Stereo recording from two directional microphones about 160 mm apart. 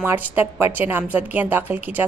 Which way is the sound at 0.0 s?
15° right (ahead or behind).